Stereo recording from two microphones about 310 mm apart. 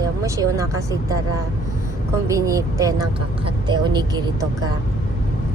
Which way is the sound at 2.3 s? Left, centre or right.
Centre.